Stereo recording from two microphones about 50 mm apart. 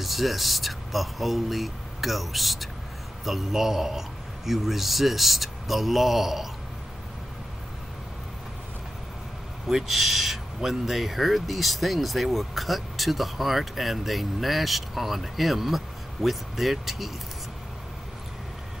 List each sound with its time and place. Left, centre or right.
0.0 s speech: centre
9.7 s speech: centre